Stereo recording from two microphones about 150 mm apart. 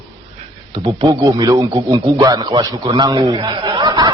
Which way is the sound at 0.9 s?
30° right (ahead or behind).